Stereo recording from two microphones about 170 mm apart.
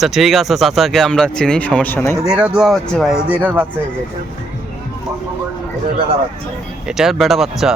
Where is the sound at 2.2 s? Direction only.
5° right (ahead or behind).